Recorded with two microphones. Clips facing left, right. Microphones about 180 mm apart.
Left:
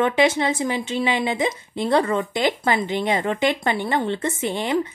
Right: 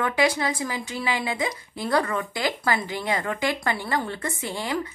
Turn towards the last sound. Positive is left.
turn(degrees=20)  # may be behind; listen again after turning